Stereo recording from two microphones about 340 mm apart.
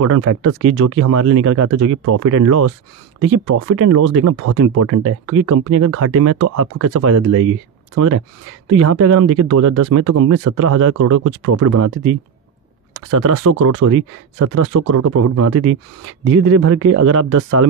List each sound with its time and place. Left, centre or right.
0.0 s speech: right
3.7 s speech: right